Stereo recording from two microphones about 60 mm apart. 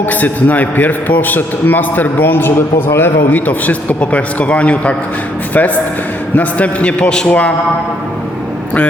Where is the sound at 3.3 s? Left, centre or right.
Left.